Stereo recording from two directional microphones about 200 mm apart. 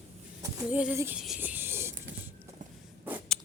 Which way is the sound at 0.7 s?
10° right (ahead or behind).